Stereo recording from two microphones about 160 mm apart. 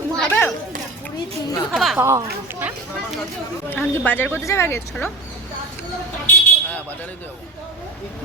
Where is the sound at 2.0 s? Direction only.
20° right (ahead or behind).